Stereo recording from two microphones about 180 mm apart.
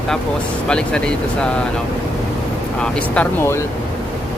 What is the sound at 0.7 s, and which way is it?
Speech, 5° left (ahead or behind).